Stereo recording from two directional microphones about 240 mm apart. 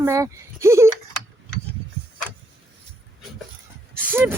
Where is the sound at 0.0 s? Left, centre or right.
Centre.